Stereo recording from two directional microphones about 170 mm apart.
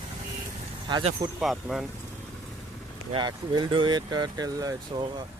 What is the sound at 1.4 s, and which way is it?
Speech, centre (ahead or behind).